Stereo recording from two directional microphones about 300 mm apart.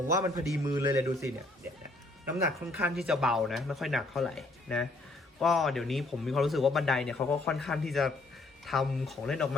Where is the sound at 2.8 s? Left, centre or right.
Centre.